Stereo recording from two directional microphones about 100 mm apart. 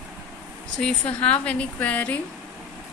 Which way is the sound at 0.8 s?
10° left (ahead or behind).